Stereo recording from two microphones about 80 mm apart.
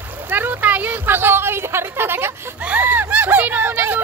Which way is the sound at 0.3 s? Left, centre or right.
Right.